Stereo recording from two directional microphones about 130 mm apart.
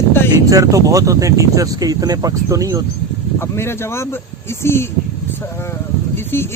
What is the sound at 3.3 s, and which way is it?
Speech, 20° left (ahead or behind).